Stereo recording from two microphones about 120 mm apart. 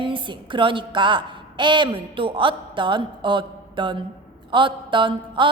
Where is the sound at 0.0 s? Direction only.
45° right (ahead or behind).